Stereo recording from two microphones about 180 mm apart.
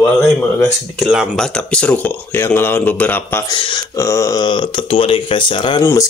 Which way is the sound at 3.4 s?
25° left (ahead or behind).